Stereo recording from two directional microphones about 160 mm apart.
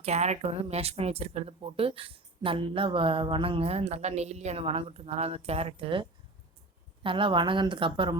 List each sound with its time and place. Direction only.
0.0 s speech: 45° right (ahead or behind)